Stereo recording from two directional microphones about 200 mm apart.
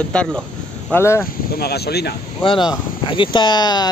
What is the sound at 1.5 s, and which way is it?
Speech, 50° left (ahead or behind).